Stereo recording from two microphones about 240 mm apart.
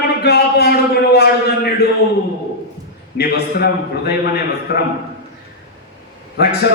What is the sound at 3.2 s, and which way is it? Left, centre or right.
Speech, left.